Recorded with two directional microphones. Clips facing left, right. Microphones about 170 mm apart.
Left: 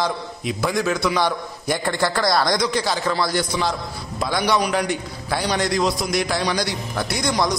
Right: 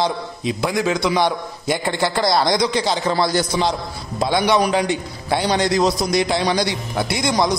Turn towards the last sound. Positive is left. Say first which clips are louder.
# right 3 dB
turn(degrees=-25)  # may be behind; listen again after turning